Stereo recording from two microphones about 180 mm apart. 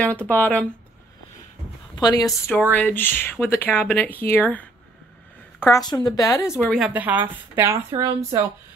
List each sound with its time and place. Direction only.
0.0 s speech: 10° left (ahead or behind)
2.0 s a woman's voice: 20° left (ahead or behind)
6.9 s a woman's voice: 10° right (ahead or behind)